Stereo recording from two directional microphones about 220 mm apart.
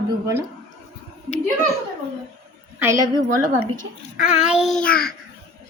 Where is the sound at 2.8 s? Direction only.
15° right (ahead or behind).